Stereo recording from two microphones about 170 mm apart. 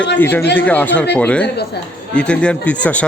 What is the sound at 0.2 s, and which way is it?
A man's voice, 10° left (ahead or behind).